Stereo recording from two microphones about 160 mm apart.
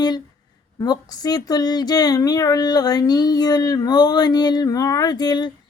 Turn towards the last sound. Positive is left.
turn(degrees=25)  # may be behind; listen again after turning